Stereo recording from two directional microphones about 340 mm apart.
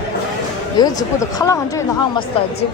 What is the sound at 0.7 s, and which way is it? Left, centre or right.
Speech, centre.